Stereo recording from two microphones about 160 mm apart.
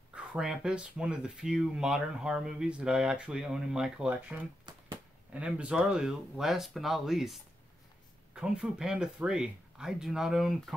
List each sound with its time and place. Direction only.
0.1 s speech: 5° right (ahead or behind)
4.7 s a sound: 30° right (ahead or behind)
5.3 s speech: 10° right (ahead or behind)
8.4 s speech: 5° right (ahead or behind)